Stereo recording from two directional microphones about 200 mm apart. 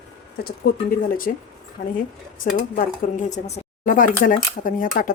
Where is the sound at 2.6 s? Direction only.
40° left (ahead or behind).